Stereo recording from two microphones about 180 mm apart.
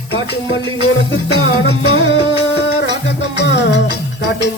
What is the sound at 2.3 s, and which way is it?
Music, 75° left (ahead or behind).